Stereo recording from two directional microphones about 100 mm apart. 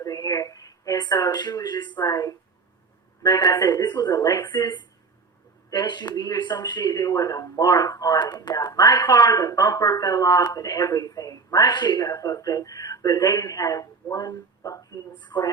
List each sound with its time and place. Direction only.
0.0 s speech: 35° left (ahead or behind)
15.2 s speech: 50° left (ahead or behind)